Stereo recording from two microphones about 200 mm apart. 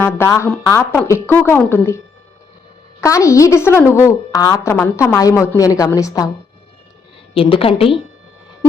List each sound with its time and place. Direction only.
0.0 s a woman's voice: 15° left (ahead or behind)
3.0 s a woman's voice: 15° left (ahead or behind)
7.3 s a woman's voice: 25° left (ahead or behind)